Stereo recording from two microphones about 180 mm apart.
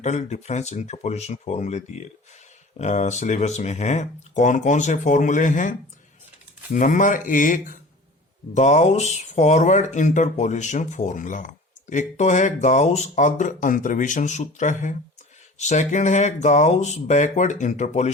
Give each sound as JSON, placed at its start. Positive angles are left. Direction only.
{"t": 0.0, "sound": "speech", "side_deg": 40}